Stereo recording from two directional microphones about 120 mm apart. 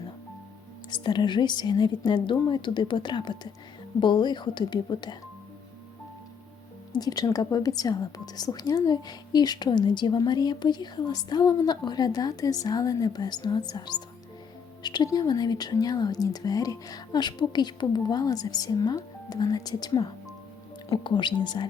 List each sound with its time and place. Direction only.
0.9 s speech: 40° left (ahead or behind)
6.9 s speech: 35° left (ahead or behind)